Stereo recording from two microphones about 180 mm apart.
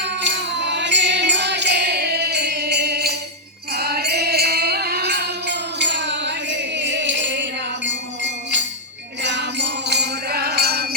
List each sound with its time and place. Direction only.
0.0 s music: 75° right (ahead or behind)